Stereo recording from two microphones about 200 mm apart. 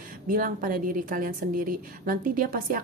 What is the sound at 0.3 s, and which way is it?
A woman's voice, 45° right (ahead or behind).